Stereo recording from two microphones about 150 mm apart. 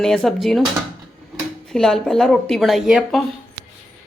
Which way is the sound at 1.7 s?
5° left (ahead or behind).